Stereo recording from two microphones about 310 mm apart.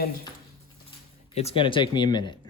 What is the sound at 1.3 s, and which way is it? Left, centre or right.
Speech, centre.